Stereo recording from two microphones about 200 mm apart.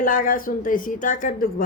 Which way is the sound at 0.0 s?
45° left (ahead or behind).